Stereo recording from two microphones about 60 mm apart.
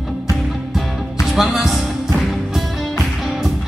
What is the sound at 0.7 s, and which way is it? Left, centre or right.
Music, centre.